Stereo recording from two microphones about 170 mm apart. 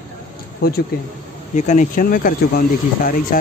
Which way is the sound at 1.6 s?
45° left (ahead or behind).